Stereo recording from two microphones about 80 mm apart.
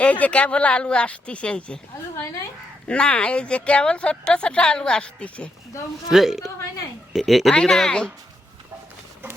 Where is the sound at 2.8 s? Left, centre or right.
Centre.